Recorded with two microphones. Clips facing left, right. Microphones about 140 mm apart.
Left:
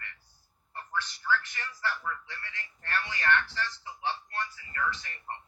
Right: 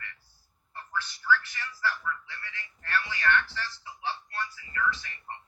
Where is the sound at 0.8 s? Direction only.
35° left (ahead or behind).